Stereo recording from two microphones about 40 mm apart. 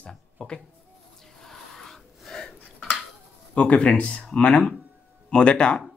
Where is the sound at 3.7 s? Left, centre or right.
Left.